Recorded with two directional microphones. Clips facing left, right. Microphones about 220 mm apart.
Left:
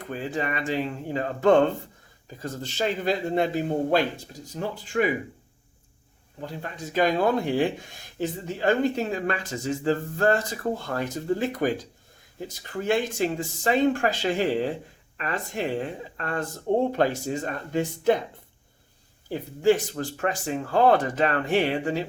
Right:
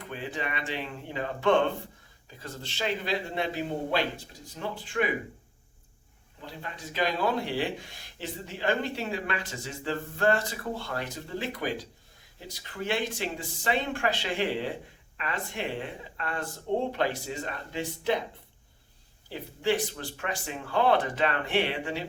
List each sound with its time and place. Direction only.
0.0 s speech: 40° left (ahead or behind)
6.4 s speech: 45° left (ahead or behind)
19.3 s speech: 45° left (ahead or behind)